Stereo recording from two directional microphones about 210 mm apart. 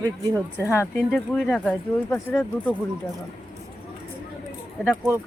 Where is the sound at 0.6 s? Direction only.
10° left (ahead or behind).